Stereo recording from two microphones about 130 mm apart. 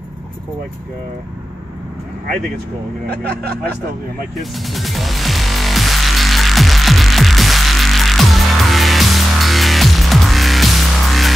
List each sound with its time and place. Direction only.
4.4 s music: centre (ahead or behind)